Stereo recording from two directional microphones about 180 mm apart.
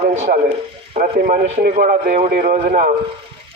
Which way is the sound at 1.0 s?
50° right (ahead or behind).